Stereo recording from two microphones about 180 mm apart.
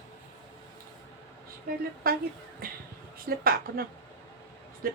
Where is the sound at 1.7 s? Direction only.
55° right (ahead or behind).